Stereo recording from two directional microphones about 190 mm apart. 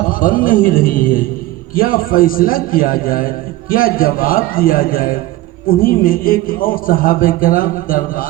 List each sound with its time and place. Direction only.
0.1 s a man's voice: 45° left (ahead or behind)